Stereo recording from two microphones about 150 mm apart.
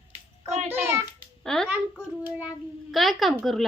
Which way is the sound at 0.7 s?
15° right (ahead or behind).